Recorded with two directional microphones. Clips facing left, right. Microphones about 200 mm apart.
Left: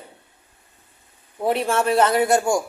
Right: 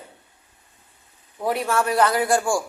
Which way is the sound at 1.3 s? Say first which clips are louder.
Left 2 dB; 25° left (ahead or behind).